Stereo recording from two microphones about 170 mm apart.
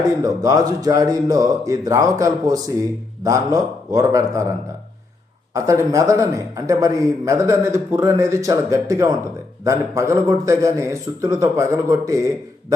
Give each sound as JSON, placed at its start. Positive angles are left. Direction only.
{"t": 0.2, "sound": "speech", "side_deg": -20}
{"t": 5.5, "sound": "a man's voice", "side_deg": -20}